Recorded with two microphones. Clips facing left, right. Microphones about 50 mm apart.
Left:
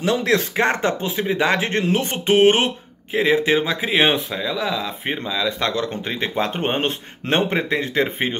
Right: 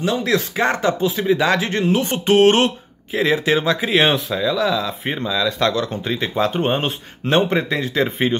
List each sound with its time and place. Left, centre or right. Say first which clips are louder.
0.0 s speech: even; left
2.2 s speech: right 1 dB; centre
5.9 s speech: right 2 dB; left